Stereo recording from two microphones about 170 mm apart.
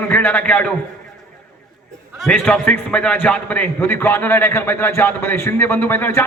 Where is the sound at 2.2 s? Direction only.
5° left (ahead or behind).